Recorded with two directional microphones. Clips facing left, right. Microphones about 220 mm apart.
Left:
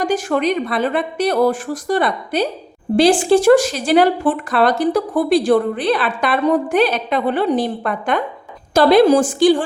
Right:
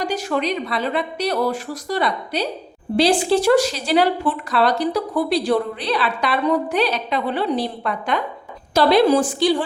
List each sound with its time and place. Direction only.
0.0 s speech: 50° left (ahead or behind)